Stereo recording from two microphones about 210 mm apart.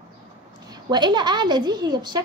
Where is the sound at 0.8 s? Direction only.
20° right (ahead or behind).